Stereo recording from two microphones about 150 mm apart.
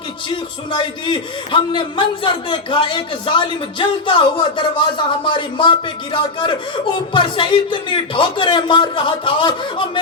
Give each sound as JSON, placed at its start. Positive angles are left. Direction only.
{"t": 0.3, "sound": "a man's voice", "side_deg": 30}